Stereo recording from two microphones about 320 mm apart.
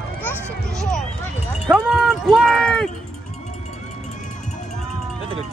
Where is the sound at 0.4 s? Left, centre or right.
Centre.